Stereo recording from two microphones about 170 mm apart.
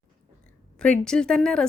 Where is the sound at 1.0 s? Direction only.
5° left (ahead or behind).